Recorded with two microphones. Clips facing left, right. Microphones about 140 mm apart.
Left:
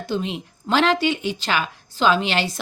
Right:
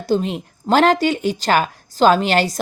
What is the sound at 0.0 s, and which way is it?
Speech, 40° right (ahead or behind).